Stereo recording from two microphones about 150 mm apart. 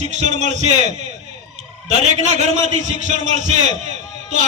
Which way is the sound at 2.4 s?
50° right (ahead or behind).